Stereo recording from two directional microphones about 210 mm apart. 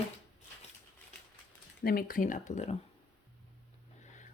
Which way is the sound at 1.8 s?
45° left (ahead or behind).